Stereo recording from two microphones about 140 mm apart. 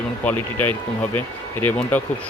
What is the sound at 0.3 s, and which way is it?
Speech, 15° left (ahead or behind).